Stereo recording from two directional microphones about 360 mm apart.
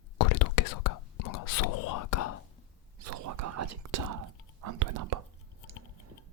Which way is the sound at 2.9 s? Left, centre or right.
Right.